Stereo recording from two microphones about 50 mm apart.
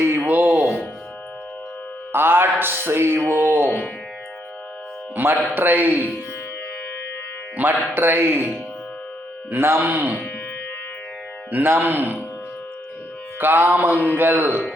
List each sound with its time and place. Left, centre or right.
0.0 s a sound: right
2.1 s speech: right
3.7 s speech: centre
5.1 s music: right
5.5 s mantra: right
7.5 s speech: right
9.5 s speech: right
11.5 s mantra: right
13.4 s mantra: right
14.2 s speech: right